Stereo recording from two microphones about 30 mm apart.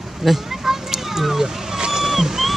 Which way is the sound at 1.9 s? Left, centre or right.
Centre.